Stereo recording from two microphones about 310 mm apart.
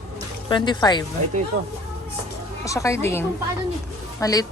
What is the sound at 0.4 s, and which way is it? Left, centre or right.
Speech, centre.